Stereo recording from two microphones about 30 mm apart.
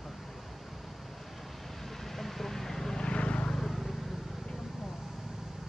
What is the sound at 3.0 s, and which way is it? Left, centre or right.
Vehicle, left.